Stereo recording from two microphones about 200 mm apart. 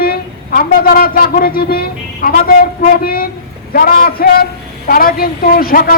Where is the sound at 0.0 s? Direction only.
45° left (ahead or behind).